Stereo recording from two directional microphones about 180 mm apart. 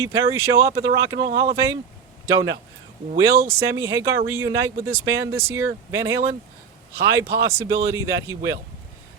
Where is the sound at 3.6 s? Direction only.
15° right (ahead or behind).